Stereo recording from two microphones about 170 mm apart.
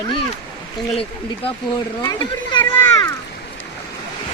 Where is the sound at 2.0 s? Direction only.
25° left (ahead or behind).